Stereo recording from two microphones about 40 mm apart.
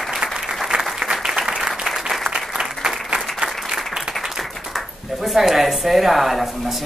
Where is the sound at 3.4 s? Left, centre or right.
Right.